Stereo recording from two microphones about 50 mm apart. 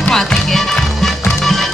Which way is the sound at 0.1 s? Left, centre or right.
Centre.